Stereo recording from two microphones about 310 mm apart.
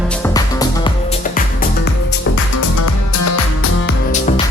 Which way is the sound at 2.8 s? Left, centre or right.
Left.